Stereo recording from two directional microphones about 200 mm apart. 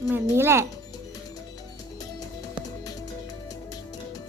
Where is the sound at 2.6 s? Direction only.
20° left (ahead or behind).